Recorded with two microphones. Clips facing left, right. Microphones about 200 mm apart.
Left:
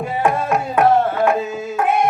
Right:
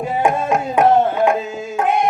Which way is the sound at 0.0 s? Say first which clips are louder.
Right 1 dB; 15° right (ahead or behind).